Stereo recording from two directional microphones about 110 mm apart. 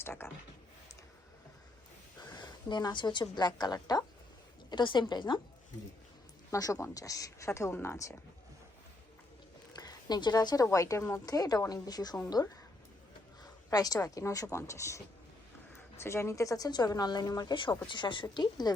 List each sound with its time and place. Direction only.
0.0 s speech: 20° left (ahead or behind)
2.2 s a woman's voice: 40° left (ahead or behind)
6.5 s speech: 30° left (ahead or behind)
9.7 s a woman's voice: 40° left (ahead or behind)
13.4 s a woman's voice: 35° left (ahead or behind)
17.5 s speech: 45° left (ahead or behind)